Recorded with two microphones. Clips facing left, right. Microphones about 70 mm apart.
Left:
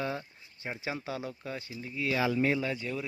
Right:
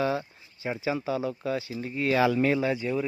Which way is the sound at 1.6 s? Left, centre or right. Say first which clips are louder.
Right 8 dB; right.